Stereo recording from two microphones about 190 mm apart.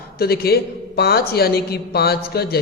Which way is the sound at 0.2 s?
55° left (ahead or behind).